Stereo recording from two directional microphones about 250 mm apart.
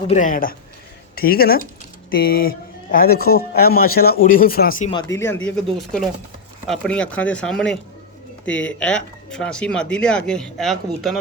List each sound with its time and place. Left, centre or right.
0.1 s speech: left
4.9 s speech: centre